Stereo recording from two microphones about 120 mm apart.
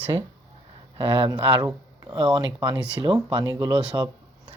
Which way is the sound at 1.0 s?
45° right (ahead or behind).